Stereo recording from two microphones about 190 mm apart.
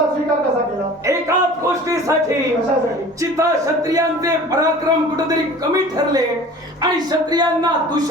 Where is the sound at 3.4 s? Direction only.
20° right (ahead or behind).